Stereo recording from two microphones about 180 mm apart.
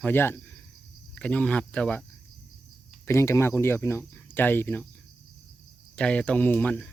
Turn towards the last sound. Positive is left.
turn(degrees=10)  # may be behind; listen again after turning